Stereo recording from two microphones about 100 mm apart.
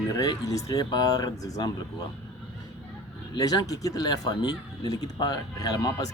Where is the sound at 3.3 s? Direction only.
40° left (ahead or behind).